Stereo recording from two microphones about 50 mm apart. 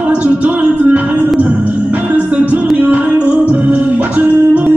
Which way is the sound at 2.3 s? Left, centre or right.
Right.